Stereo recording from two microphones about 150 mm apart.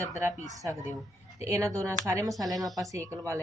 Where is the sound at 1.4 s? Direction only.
20° right (ahead or behind).